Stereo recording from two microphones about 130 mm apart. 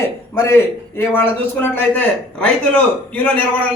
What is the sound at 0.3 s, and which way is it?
A man's voice, 20° left (ahead or behind).